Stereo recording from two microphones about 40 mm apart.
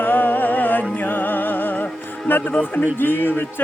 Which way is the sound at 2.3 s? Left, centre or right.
Left.